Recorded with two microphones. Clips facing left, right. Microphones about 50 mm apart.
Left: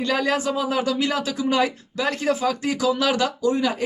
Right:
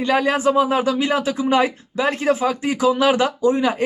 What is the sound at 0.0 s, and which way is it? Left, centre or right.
Speech, right.